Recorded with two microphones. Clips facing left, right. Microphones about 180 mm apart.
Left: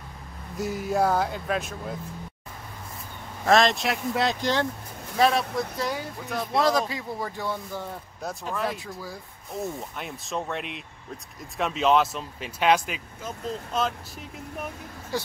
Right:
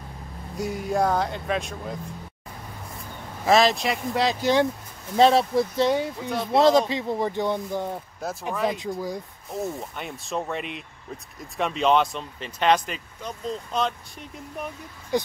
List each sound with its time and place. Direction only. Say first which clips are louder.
0.6 s speech: even; centre (ahead or behind)
3.4 s speech: right 1 dB; centre (ahead or behind)
5.1 s speech: right 5 dB; 30° right (ahead or behind)
6.2 s speech: right 3 dB; centre (ahead or behind)
6.5 s speech: right 6 dB; 25° right (ahead or behind)
9.5 s speech: right 2 dB; centre (ahead or behind)
15.1 s speech: right 6 dB; 20° right (ahead or behind)